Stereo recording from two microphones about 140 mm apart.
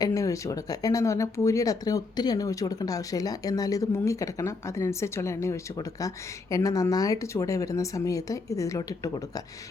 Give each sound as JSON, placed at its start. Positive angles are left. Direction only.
{"t": 0.0, "sound": "speech", "side_deg": 25}